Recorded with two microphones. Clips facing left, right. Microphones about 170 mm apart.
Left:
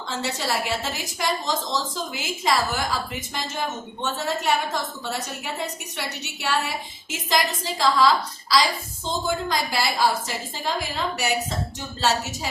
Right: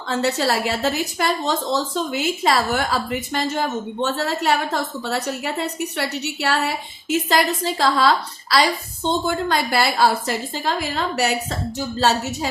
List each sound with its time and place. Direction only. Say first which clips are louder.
0.1 s a woman's voice: right 7 dB; 65° right (ahead or behind)